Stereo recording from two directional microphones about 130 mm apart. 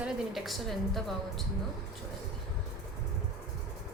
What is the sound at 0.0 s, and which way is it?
A woman's voice, centre (ahead or behind).